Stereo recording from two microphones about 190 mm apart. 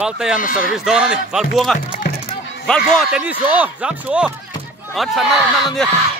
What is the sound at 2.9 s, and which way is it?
A man's voice, 5° right (ahead or behind).